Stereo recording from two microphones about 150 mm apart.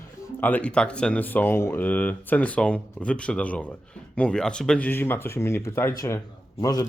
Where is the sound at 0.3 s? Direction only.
10° left (ahead or behind).